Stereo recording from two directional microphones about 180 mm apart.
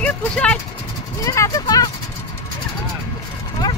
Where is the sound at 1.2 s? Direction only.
20° left (ahead or behind).